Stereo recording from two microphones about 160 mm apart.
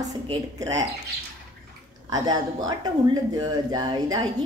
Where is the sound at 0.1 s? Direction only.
25° right (ahead or behind).